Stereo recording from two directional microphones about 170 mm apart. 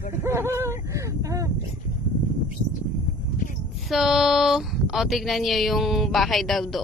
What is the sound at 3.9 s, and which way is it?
Speech, centre (ahead or behind).